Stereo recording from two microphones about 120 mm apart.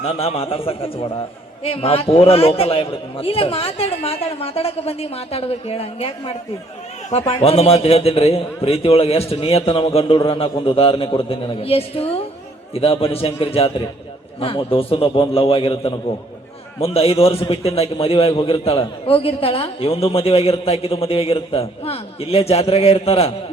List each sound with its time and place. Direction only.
0.0 s a man's voice: 55° left (ahead or behind)